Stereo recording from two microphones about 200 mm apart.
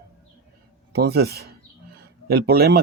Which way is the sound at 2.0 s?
50° right (ahead or behind).